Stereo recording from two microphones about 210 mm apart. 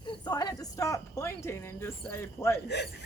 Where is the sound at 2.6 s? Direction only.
55° left (ahead or behind).